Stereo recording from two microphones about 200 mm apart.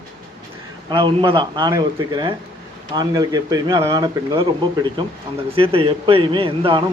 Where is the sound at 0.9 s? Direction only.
25° right (ahead or behind).